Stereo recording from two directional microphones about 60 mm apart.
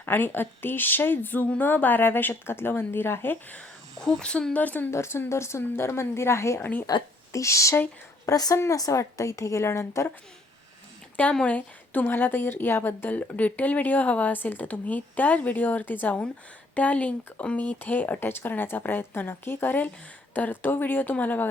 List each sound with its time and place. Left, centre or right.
0.0 s speech: left
3.9 s a woman's voice: centre; by 4.9 s left
4.9 s a woman's voice: left
6.6 s speech: left
7.3 s a woman's voice: left
8.3 s a woman's voice: left
8.7 s speech: left
9.0 s a woman's voice: left
11.4 s a woman's voice: left